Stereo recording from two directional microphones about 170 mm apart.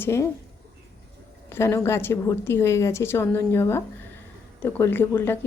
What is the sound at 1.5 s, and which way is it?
A woman's voice, 15° left (ahead or behind).